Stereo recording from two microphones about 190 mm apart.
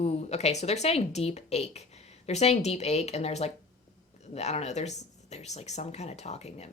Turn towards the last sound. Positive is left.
turn(degrees=35)  # may be behind; listen again after turning